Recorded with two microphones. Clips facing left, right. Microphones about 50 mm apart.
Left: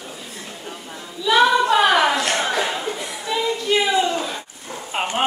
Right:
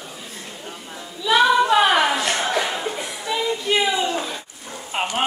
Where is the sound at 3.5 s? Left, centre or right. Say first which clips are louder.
Left 2 dB; centre.